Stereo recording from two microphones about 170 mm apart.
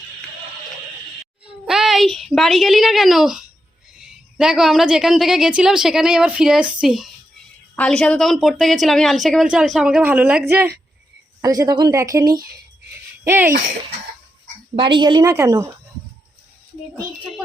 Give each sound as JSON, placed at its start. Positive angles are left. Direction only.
{"t": 1.6, "sound": "a woman's voice", "side_deg": 0}
{"t": 11.4, "sound": "a woman's voice", "side_deg": -20}
{"t": 14.8, "sound": "a woman's voice", "side_deg": -30}